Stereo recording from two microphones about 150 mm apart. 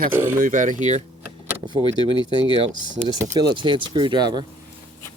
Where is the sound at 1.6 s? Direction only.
30° right (ahead or behind).